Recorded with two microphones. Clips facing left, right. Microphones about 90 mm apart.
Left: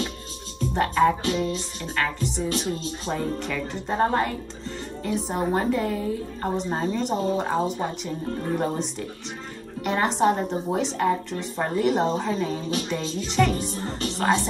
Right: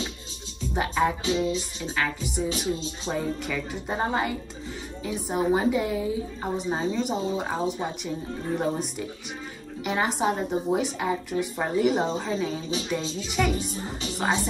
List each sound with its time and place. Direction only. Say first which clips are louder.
0.7 s a woman's voice: left 4 dB; 5° right (ahead or behind)
1.3 s speech: right 1 dB; 15° right (ahead or behind)
2.5 s speech: left 1 dB; 45° left (ahead or behind)
3.1 s a woman's voice: left 1 dB; 5° right (ahead or behind)